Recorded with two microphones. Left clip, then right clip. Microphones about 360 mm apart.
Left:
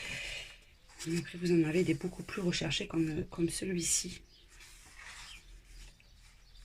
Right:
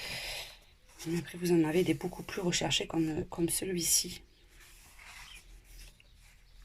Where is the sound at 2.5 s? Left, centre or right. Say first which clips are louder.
Right 4 dB; centre.